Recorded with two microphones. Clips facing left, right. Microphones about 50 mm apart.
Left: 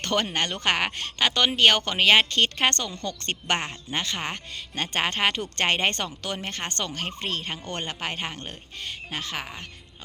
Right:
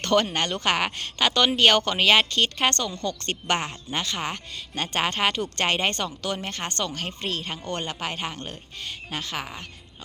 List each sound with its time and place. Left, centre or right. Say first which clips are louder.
0.0 s speech: right 3 dB; left
2.3 s speech: even; left
9.4 s speech: right 1 dB; centre